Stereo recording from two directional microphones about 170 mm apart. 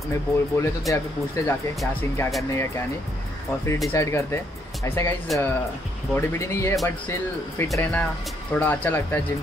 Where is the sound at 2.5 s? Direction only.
15° left (ahead or behind).